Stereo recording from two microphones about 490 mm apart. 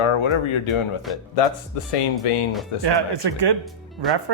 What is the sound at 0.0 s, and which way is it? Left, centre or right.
Speech, left.